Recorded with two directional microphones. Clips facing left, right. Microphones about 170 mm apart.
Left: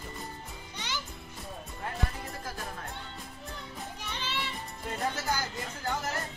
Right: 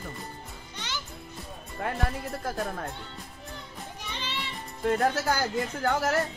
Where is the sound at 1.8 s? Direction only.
65° right (ahead or behind).